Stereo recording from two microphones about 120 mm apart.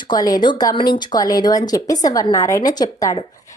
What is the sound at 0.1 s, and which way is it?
A woman's voice, 35° left (ahead or behind).